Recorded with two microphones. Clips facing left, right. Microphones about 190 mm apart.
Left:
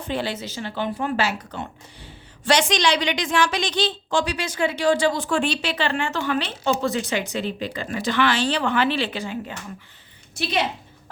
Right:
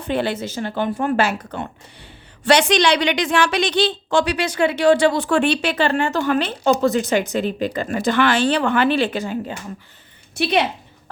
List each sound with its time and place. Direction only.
0.0 s speech: 55° right (ahead or behind)
10.3 s speech: 65° right (ahead or behind)